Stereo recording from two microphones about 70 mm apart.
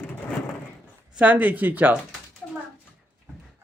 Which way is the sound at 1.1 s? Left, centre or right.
Right.